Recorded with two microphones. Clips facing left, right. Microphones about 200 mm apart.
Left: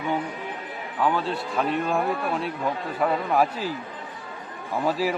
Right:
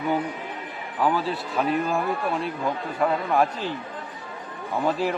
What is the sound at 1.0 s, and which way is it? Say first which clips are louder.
A man's voice: right 1 dB; 5° right (ahead or behind).